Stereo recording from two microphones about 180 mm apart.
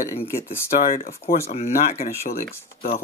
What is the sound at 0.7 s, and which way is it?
Speech, 50° left (ahead or behind).